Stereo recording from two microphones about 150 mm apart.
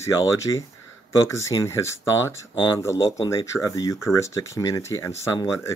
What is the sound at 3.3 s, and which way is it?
Speech, 20° left (ahead or behind).